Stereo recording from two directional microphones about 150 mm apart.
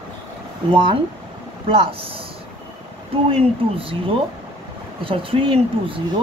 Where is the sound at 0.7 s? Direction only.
30° right (ahead or behind).